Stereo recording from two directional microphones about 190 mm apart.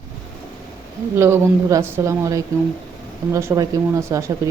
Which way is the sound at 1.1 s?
15° right (ahead or behind).